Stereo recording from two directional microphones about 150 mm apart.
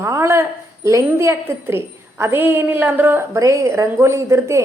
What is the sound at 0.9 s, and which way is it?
A woman's voice, 20° right (ahead or behind).